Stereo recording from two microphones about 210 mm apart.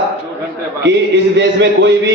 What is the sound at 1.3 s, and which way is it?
Speech, 55° right (ahead or behind).